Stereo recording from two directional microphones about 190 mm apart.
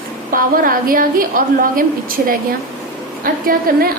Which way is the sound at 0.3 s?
50° right (ahead or behind).